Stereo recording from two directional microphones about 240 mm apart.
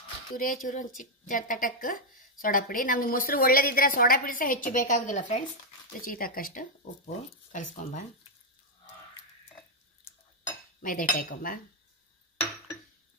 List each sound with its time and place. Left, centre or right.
0.4 s a woman's voice: left
10.8 s a woman's voice: left